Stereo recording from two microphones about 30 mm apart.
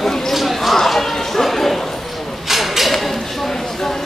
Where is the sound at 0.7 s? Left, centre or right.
Centre.